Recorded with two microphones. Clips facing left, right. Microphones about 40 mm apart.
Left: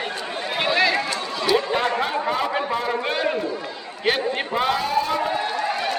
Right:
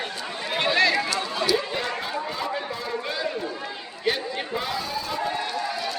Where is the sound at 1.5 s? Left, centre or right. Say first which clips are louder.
Left 8 dB; left.